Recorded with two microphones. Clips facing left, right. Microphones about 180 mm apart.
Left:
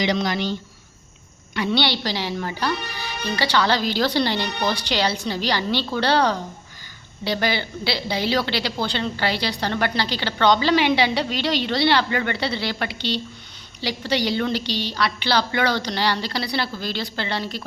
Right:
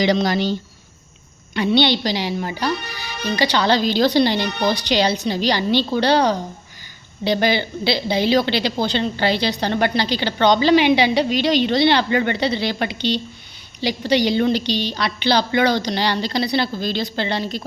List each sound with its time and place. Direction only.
0.0 s speech: 35° right (ahead or behind)
1.5 s a woman's voice: 20° right (ahead or behind)